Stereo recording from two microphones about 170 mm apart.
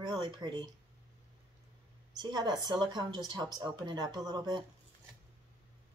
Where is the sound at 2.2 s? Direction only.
25° right (ahead or behind).